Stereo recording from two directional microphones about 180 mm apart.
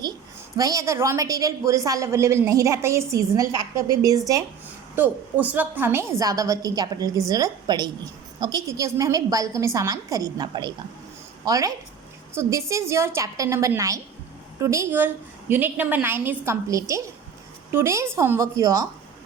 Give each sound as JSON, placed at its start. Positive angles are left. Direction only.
{"t": 0.0, "sound": "a woman's voice", "side_deg": -20}